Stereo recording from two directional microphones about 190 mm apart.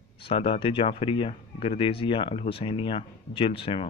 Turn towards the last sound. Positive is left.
turn(degrees=30)  # may be behind; listen again after turning